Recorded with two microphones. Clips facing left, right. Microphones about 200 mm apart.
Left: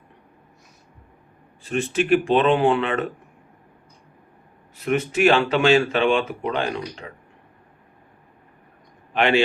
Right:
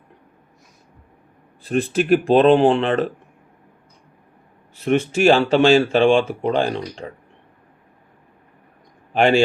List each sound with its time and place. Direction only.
1.6 s speech: 35° right (ahead or behind)
4.9 s speech: 30° right (ahead or behind)
9.1 s speech: 40° right (ahead or behind)